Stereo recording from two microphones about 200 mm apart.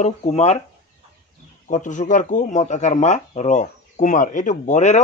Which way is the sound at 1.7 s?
40° left (ahead or behind).